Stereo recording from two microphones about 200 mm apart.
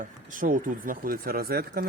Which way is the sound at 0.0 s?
40° right (ahead or behind).